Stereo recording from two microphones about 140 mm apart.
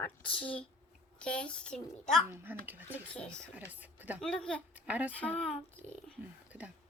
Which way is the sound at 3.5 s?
10° right (ahead or behind).